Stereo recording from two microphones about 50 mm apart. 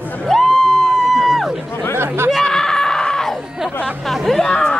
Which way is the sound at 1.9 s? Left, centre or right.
Right.